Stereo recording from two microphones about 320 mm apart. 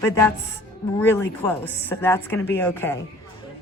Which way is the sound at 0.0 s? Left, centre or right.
Centre.